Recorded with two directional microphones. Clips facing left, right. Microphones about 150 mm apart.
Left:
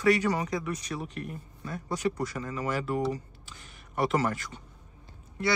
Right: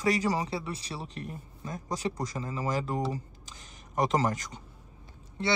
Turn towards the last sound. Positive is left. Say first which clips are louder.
# left 1 dB
turn(degrees=-25)  # may be behind; listen again after turning